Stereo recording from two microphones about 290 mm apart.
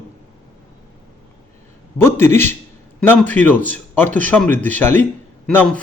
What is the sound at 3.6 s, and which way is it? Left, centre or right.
Speech, right.